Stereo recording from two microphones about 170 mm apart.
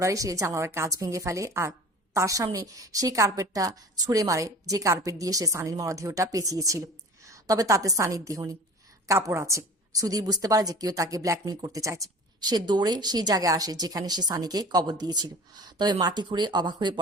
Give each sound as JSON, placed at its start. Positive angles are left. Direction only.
{"t": 0.0, "sound": "a woman's voice", "side_deg": -20}